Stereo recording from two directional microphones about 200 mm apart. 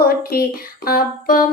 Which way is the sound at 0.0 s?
50° left (ahead or behind).